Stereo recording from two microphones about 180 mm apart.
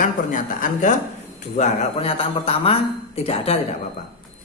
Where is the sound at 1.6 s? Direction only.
35° left (ahead or behind).